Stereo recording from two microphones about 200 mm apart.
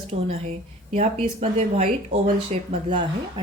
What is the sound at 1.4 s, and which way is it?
Speech, 30° right (ahead or behind).